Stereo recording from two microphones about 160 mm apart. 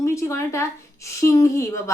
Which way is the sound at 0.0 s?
20° left (ahead or behind).